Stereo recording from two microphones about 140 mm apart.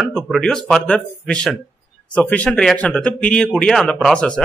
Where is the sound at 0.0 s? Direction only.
5° left (ahead or behind).